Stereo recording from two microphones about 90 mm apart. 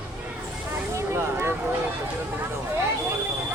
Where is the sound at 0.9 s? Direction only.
30° right (ahead or behind).